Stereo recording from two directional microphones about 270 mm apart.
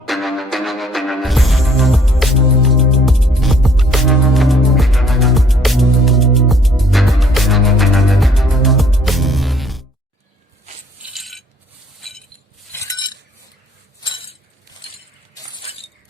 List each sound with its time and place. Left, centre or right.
0.0 s music: centre
11.1 s coin: centre
11.9 s chink: centre
12.7 s chink: centre